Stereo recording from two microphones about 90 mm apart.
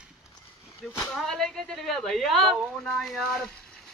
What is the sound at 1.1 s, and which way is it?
Speech, 5° left (ahead or behind).